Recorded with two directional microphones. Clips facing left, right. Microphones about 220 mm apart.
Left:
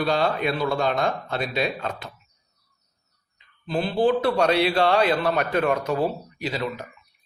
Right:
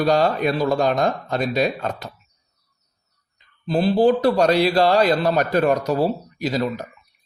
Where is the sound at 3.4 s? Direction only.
40° right (ahead or behind).